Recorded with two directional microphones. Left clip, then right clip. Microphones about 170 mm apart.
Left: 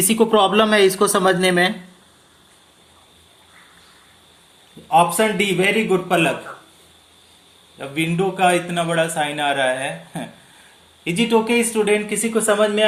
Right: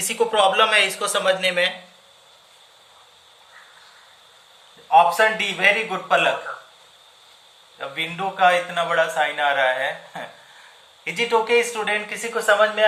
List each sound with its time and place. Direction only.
0.0 s speech: 50° left (ahead or behind)
4.9 s speech: 50° left (ahead or behind)
7.8 s a man's voice: 40° left (ahead or behind)